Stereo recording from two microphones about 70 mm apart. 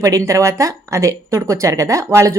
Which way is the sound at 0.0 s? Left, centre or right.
Right.